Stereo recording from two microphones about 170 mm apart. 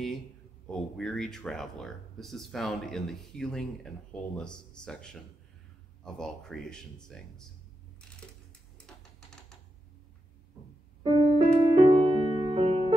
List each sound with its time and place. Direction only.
0.7 s speech: 5° left (ahead or behind)
11.0 s music: 30° right (ahead or behind)